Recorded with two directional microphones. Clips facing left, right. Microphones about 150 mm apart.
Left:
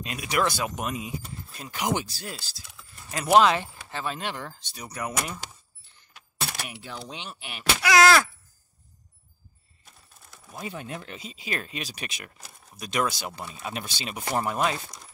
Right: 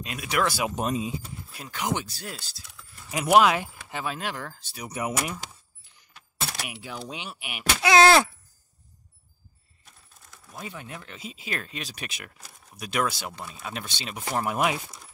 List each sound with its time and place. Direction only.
0.0 s speech: centre (ahead or behind)
0.7 s speech: 30° right (ahead or behind)
1.2 s keys jangling: 5° right (ahead or behind)
1.7 s speech: 5° left (ahead or behind)
5.1 s keys jangling: 5° right (ahead or behind)
7.8 s groan: 25° right (ahead or behind)
10.7 s speech: 25° left (ahead or behind)
11.1 s speech: centre (ahead or behind)